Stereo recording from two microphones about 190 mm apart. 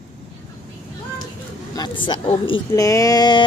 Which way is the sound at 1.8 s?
25° left (ahead or behind).